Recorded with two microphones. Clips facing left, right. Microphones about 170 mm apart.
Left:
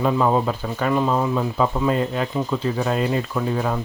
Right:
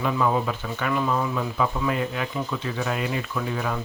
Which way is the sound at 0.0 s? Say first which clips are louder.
Left 4 dB; 35° left (ahead or behind).